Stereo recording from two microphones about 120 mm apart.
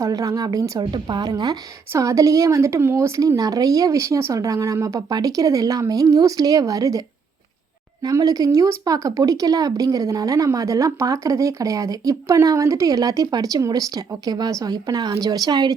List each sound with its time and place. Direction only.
0.0 s speech: 30° right (ahead or behind)
8.0 s speech: 35° right (ahead or behind)